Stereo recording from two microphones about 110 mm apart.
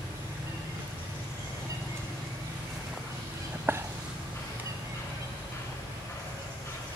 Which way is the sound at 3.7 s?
20° right (ahead or behind).